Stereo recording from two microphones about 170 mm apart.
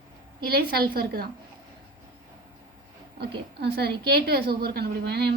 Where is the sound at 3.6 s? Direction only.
75° right (ahead or behind).